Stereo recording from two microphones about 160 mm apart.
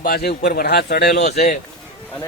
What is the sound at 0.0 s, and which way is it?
A man's voice, 75° left (ahead or behind).